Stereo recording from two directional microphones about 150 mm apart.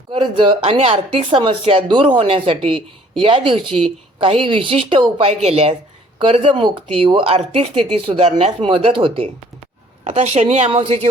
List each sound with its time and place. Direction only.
0.1 s a woman's voice: 35° right (ahead or behind)
10.7 s speech: 35° right (ahead or behind)